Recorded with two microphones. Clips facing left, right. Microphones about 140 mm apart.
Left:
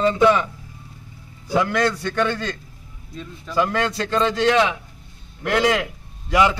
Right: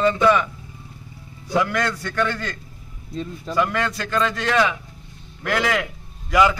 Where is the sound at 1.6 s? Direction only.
25° left (ahead or behind).